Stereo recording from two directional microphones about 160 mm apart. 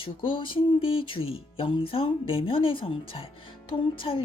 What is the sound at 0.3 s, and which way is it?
Speech, 30° left (ahead or behind).